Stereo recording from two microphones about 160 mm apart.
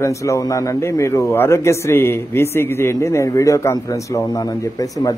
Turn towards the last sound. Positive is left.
turn(degrees=20)  # may be behind; listen again after turning